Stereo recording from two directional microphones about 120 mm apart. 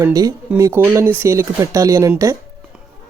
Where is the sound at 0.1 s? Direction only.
30° right (ahead or behind).